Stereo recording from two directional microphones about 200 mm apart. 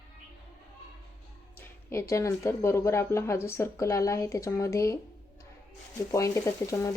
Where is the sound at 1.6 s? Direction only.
15° left (ahead or behind).